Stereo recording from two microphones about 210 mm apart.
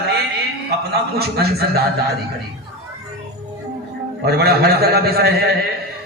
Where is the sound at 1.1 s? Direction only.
50° right (ahead or behind).